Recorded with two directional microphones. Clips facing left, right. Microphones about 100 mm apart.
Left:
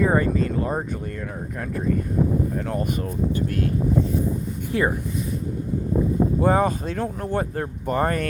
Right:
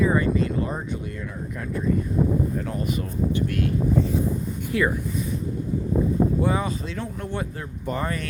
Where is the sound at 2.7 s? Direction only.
50° left (ahead or behind).